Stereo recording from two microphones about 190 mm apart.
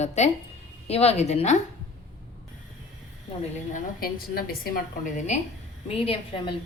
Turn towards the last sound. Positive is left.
turn(degrees=25)  # may be behind; listen again after turning